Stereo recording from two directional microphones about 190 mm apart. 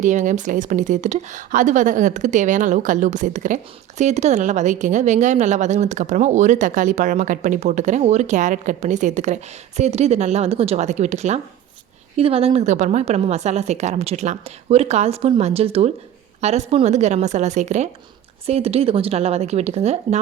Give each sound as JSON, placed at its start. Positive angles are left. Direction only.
{"t": 0.0, "sound": "speech", "side_deg": -40}